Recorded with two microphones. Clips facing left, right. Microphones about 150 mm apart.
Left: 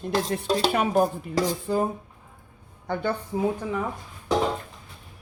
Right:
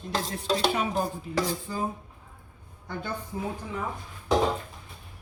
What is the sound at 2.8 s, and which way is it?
Speech, 65° left (ahead or behind).